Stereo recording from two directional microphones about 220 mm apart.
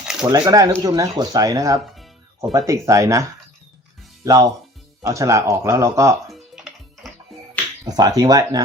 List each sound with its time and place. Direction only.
0.3 s speech: 15° right (ahead or behind)
7.0 s music: centre (ahead or behind)
7.9 s speech: 15° right (ahead or behind)